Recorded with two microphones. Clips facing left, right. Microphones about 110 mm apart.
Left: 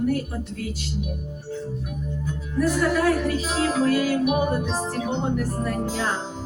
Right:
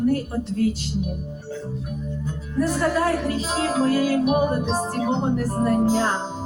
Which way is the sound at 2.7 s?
30° right (ahead or behind).